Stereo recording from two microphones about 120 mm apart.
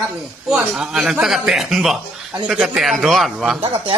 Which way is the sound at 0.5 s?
5° right (ahead or behind).